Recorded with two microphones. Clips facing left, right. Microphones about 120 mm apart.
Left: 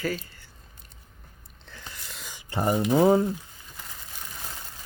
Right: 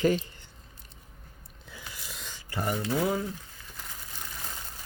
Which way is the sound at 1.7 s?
5° right (ahead or behind).